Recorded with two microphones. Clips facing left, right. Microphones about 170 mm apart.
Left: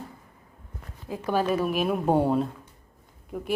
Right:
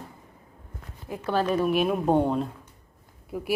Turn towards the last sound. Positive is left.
turn(degrees=-5)  # may be behind; listen again after turning